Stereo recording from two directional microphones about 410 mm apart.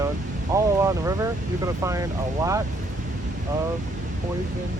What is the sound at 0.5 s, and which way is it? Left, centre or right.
Speech, centre.